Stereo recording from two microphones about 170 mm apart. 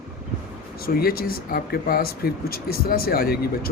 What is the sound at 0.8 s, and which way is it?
Speech, 60° left (ahead or behind).